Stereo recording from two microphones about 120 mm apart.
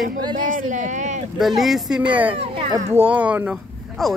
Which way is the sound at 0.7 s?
90° right.